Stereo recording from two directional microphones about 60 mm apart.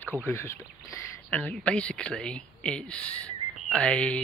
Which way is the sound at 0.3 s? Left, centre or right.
Left.